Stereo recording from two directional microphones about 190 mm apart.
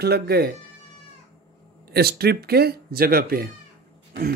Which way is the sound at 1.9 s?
55° right (ahead or behind).